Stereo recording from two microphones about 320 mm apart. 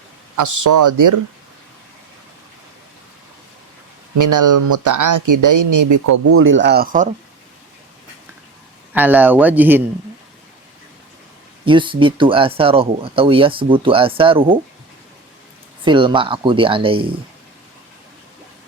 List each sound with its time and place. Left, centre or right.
0.3 s speech: right
4.2 s speech: right
6.2 s speech: right
8.9 s speech: centre
11.6 s speech: centre
15.8 s speech: centre